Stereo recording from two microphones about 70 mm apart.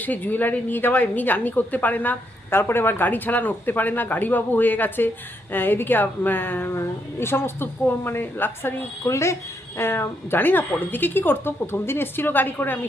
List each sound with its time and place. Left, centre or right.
0.0 s a woman's voice: left
9.0 s a woman's voice: left